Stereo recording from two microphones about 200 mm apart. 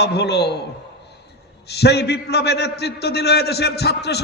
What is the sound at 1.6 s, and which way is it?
A man's voice, 55° left (ahead or behind).